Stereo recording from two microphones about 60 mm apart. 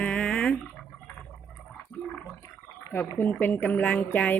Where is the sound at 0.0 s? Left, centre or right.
Left.